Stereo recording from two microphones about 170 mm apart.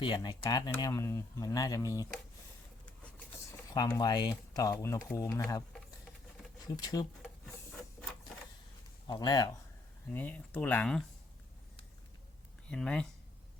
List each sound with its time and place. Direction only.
0.0 s speech: 25° left (ahead or behind)
3.8 s speech: 25° left (ahead or behind)
6.7 s speech: 25° left (ahead or behind)
9.0 s speech: 25° left (ahead or behind)
10.1 s speech: 10° left (ahead or behind)
12.6 s speech: 5° left (ahead or behind)